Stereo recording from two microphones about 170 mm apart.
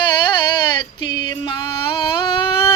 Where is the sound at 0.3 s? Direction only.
30° left (ahead or behind).